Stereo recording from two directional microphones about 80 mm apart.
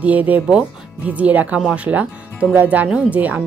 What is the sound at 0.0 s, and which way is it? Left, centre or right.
Speech, centre.